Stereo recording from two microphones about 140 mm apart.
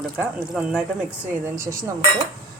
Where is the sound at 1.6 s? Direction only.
20° right (ahead or behind).